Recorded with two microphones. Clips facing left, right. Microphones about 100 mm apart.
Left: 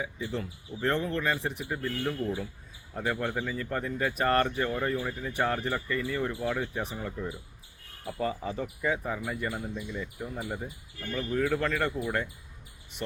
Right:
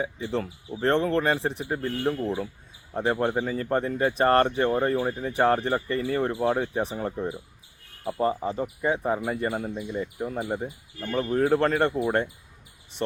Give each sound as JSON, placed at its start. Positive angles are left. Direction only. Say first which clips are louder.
{"t": 0.0, "sound": "speech", "louder": "right 5 dB", "side_deg": -35}
{"t": 9.0, "sound": "speech", "louder": "right 7 dB", "side_deg": -40}